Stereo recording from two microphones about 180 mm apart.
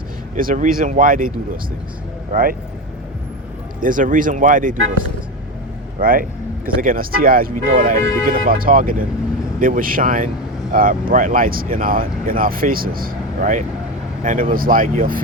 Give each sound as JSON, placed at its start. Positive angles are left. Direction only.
{"t": 0.3, "sound": "speech", "side_deg": -50}
{"t": 2.3, "sound": "speech", "side_deg": -50}
{"t": 3.8, "sound": "speech", "side_deg": -50}
{"t": 6.0, "sound": "speech", "side_deg": -50}